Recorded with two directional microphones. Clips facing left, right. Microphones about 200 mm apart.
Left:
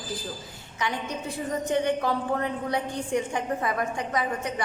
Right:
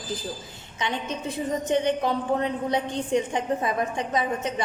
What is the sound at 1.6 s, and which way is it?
A woman's voice, 20° right (ahead or behind).